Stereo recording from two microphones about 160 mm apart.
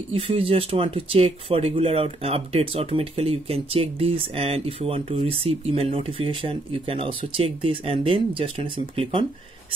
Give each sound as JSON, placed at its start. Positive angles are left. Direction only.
{"t": 0.1, "sound": "speech", "side_deg": -35}